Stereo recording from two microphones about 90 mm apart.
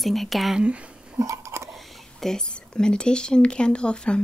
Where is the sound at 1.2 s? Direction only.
35° right (ahead or behind).